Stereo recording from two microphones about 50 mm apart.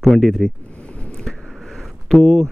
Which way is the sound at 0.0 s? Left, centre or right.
Centre.